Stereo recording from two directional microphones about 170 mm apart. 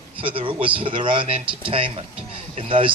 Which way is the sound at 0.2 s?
30° right (ahead or behind).